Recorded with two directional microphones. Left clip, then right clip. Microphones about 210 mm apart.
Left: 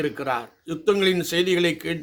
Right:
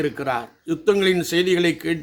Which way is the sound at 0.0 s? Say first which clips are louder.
Right 2 dB; 5° left (ahead or behind).